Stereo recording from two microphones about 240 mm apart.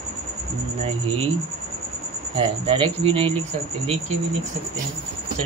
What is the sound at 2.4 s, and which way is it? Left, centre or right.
Speech, right.